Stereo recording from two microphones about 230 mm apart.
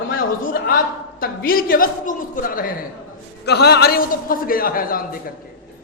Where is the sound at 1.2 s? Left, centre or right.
Left.